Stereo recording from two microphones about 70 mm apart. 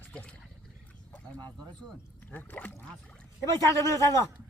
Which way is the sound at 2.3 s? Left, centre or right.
Left.